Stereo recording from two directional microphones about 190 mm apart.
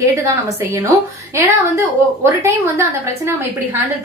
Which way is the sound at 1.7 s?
15° right (ahead or behind).